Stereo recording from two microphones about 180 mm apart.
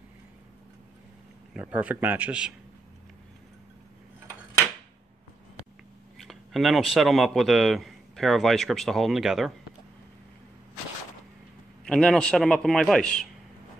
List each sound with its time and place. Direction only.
1.5 s a man's voice: 10° right (ahead or behind)
6.1 s speech: centre (ahead or behind)
11.8 s a man's voice: 5° left (ahead or behind)